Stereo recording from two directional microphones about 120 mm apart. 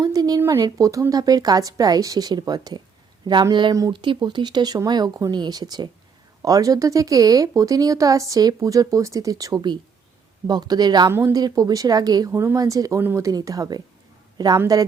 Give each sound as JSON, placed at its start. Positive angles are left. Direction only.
{"t": 0.0, "sound": "speech", "side_deg": -30}
{"t": 3.9, "sound": "speech", "side_deg": -40}